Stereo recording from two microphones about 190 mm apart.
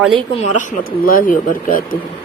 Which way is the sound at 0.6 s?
45° left (ahead or behind).